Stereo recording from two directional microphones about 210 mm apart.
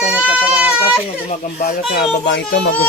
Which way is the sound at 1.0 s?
35° left (ahead or behind).